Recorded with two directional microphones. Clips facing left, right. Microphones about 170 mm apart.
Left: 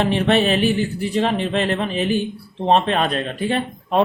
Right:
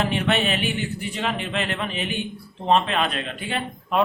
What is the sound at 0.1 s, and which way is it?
Speech, 35° left (ahead or behind).